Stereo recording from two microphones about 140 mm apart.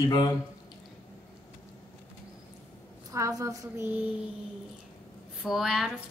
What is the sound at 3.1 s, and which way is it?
Speech, 25° right (ahead or behind).